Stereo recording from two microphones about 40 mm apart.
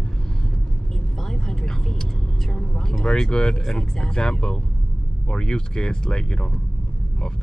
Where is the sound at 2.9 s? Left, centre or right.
Centre.